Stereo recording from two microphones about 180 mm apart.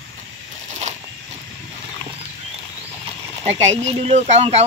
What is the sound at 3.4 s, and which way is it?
Speech, 35° right (ahead or behind).